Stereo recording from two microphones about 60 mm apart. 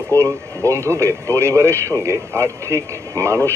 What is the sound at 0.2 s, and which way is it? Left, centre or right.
Speech, right.